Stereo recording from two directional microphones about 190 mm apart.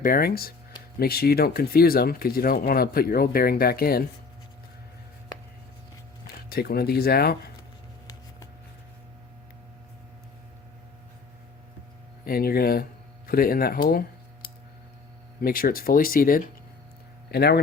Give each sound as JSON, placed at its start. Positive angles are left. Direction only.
{"t": 0.0, "sound": "speech", "side_deg": 50}
{"t": 6.2, "sound": "speech", "side_deg": 55}
{"t": 12.2, "sound": "speech", "side_deg": 50}
{"t": 15.4, "sound": "speech", "side_deg": 50}
{"t": 17.3, "sound": "a man's voice", "side_deg": 60}